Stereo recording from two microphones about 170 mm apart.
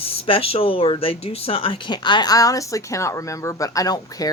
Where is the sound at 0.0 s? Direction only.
35° left (ahead or behind).